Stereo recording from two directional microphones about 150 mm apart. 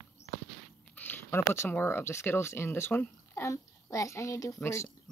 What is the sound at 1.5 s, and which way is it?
Speech, 15° left (ahead or behind).